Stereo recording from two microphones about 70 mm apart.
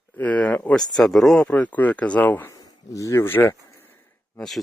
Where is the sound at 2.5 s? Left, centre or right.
Left.